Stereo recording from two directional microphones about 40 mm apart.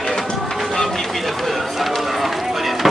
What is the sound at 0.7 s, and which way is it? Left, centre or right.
Run, centre.